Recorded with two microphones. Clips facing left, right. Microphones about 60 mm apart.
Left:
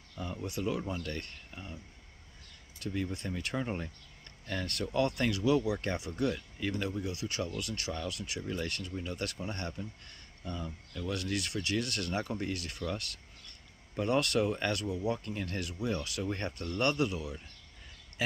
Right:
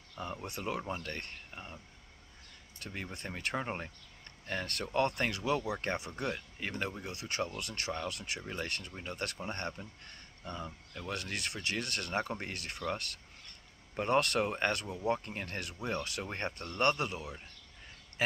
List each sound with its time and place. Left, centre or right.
0.4 s speech: right
0.8 s speech: right
2.8 s speech: right